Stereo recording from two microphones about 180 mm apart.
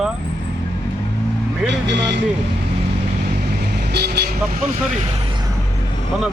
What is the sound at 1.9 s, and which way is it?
Speech, 80° right.